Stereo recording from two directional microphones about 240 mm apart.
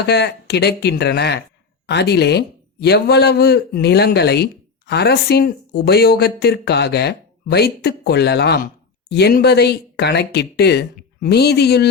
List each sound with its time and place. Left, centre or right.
0.0 s speech: left